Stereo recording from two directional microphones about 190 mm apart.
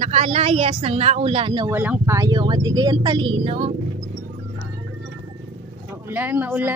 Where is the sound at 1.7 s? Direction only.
10° right (ahead or behind); by 3.7 s 30° right (ahead or behind).